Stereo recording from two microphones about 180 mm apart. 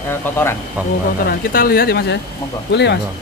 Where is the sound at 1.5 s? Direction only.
55° left (ahead or behind).